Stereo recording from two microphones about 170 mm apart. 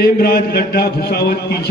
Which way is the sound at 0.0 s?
65° left (ahead or behind).